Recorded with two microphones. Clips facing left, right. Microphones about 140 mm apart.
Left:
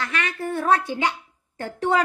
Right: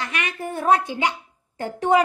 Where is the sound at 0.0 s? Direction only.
15° right (ahead or behind).